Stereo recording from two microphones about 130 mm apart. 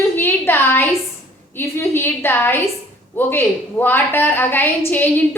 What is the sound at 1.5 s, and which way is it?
A woman's voice, 20° left (ahead or behind).